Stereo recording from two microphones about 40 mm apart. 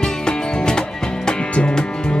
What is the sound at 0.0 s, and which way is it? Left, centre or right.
Music, centre.